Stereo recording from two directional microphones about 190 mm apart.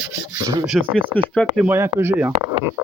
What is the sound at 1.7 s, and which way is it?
Speech, 15° right (ahead or behind).